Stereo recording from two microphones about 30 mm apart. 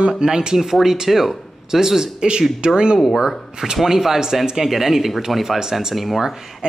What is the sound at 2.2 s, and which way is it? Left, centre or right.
Speech, right.